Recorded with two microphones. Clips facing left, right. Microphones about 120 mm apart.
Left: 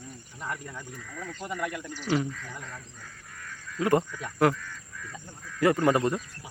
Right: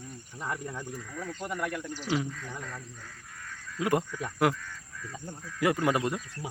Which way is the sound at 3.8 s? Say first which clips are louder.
Left 3 dB; 10° right (ahead or behind).